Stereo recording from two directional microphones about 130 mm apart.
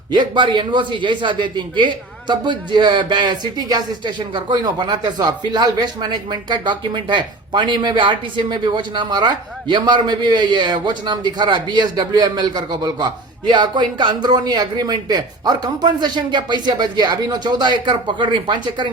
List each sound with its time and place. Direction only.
0.1 s a man's voice: 35° right (ahead or behind)